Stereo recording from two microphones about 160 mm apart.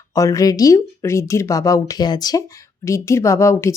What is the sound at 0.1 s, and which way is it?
Speech, 20° left (ahead or behind).